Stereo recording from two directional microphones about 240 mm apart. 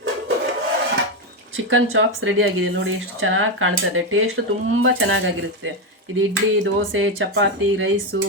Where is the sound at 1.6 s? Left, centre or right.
Right.